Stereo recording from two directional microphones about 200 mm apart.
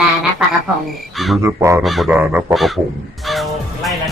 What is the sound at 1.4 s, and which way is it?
Speech, 15° right (ahead or behind).